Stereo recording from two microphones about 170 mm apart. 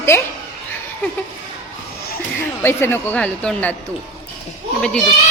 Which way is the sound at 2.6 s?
15° left (ahead or behind).